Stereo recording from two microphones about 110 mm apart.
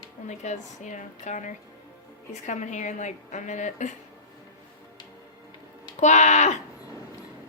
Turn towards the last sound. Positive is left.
turn(degrees=90)